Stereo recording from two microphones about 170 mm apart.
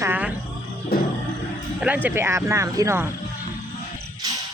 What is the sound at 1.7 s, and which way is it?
Speech, 10° right (ahead or behind).